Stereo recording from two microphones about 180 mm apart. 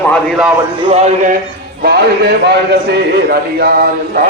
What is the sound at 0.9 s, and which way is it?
Speech, 40° right (ahead or behind).